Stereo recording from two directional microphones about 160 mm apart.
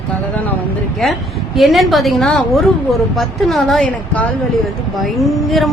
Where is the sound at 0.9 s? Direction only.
Centre (ahead or behind).